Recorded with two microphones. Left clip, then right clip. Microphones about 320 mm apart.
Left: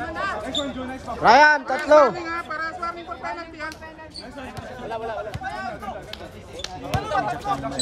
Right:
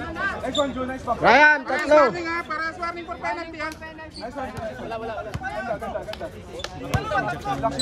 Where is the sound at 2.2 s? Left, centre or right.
Right.